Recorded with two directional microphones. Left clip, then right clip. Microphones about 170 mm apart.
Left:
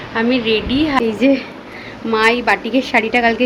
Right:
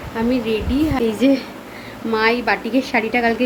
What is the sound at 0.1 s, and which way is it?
A woman's voice, 15° right (ahead or behind).